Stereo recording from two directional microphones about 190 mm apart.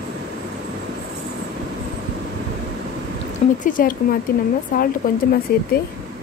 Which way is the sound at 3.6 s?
45° left (ahead or behind).